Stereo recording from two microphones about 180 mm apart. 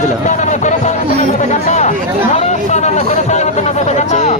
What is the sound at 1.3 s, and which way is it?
Chatter, 40° left (ahead or behind).